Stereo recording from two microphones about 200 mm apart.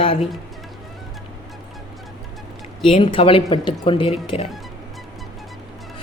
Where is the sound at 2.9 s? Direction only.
25° left (ahead or behind).